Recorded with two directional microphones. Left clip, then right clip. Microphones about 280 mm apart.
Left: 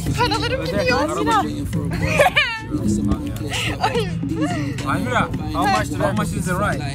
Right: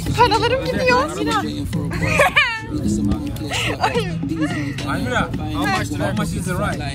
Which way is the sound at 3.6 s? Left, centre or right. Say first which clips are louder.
Right 1 dB; centre.